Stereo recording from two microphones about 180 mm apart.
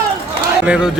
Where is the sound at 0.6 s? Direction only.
5° right (ahead or behind).